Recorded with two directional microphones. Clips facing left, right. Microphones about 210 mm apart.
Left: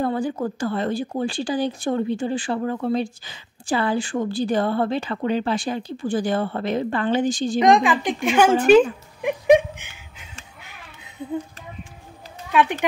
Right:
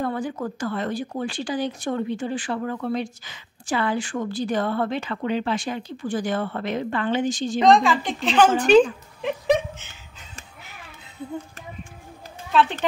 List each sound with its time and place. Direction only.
0.0 s speech: 30° left (ahead or behind)
7.6 s a woman's voice: 15° left (ahead or behind)
12.5 s a woman's voice: 15° left (ahead or behind)